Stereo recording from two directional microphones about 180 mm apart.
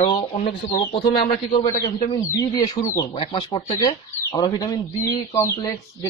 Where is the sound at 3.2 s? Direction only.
35° left (ahead or behind).